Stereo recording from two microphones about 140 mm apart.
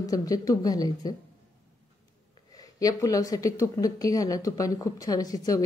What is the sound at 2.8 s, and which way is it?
Speech, 25° left (ahead or behind).